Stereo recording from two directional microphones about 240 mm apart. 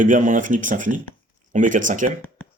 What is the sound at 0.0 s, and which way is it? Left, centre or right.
Speech, right.